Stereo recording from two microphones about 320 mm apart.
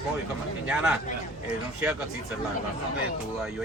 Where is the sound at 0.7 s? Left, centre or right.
Centre.